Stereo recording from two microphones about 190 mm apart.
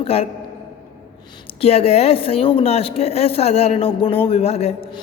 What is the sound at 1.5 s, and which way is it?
A woman's voice, 30° left (ahead or behind).